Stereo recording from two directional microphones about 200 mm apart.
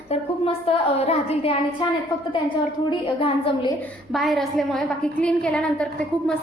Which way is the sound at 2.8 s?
25° left (ahead or behind).